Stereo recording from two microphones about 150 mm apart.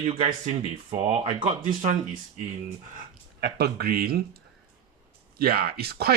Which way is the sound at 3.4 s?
90° right.